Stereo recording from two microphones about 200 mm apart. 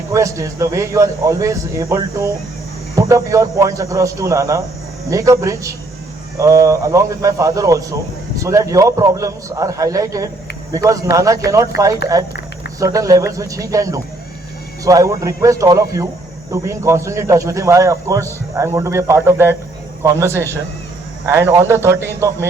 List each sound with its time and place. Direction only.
0.1 s speech: 15° right (ahead or behind)